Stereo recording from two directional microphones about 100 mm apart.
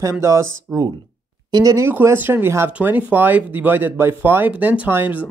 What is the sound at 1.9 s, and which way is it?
Speech, 20° right (ahead or behind).